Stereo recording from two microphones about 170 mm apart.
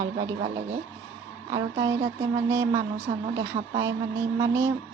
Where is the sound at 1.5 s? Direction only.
20° right (ahead or behind).